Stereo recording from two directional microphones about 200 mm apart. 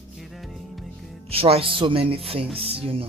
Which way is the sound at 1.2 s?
30° right (ahead or behind).